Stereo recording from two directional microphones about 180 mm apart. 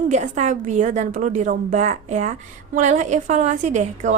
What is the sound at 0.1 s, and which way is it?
A woman's voice, 40° right (ahead or behind).